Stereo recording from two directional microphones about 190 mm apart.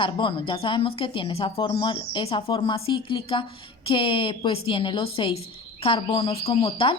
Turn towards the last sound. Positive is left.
turn(degrees=30)  # may be behind; listen again after turning